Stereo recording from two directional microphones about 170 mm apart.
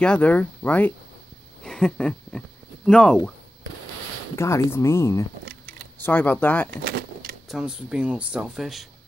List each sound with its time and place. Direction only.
0.0 s speech: 5° left (ahead or behind)
1.6 s a sound: 5° left (ahead or behind)
4.4 s speech: 15° left (ahead or behind)
6.9 s keys jangling: 60° right (ahead or behind)
7.4 s speech: 5° right (ahead or behind)